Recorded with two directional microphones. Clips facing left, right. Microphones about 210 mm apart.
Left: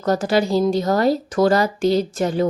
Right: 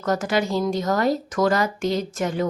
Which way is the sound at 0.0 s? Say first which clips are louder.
Left 4 dB; 35° left (ahead or behind).